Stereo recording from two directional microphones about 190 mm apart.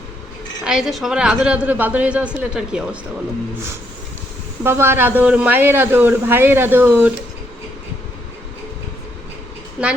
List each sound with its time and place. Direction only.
0.6 s a woman's voice: 5° right (ahead or behind)
4.6 s speech: 15° right (ahead or behind)